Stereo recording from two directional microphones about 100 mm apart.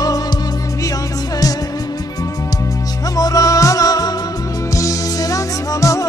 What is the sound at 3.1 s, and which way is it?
Music, 35° left (ahead or behind).